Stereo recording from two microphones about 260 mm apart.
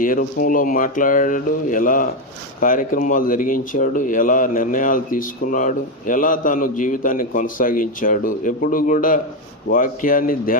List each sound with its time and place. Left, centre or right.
0.0 s speech: left